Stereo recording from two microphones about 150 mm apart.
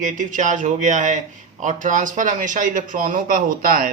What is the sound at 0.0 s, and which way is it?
A man's voice, 60° right (ahead or behind).